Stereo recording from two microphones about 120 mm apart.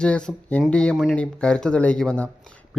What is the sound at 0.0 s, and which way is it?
Speech, 5° left (ahead or behind).